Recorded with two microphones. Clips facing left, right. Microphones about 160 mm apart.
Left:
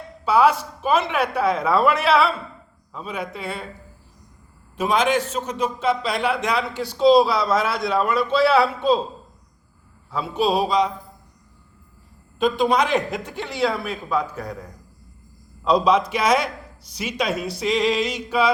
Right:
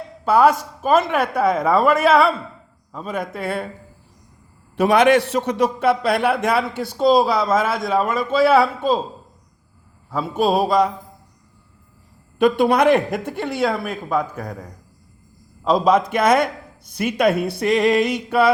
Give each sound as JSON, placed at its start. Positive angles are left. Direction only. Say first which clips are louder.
{"t": 0.3, "sound": "a man's voice", "louder": "right 2 dB", "side_deg": -45}
{"t": 4.8, "sound": "a man's voice", "louder": "right 6 dB", "side_deg": -65}
{"t": 10.1, "sound": "a man's voice", "louder": "right 2 dB", "side_deg": -50}
{"t": 12.4, "sound": "a man's voice", "louder": "right 4 dB", "side_deg": -65}